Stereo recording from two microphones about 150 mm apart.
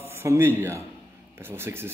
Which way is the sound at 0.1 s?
15° right (ahead or behind).